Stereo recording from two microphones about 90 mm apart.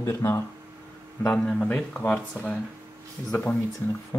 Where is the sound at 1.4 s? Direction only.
10° left (ahead or behind).